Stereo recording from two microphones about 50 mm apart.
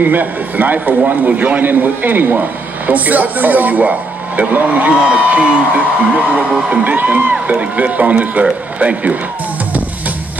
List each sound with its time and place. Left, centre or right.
0.0 s a man's voice: right